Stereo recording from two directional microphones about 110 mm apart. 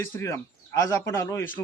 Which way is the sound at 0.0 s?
25° left (ahead or behind).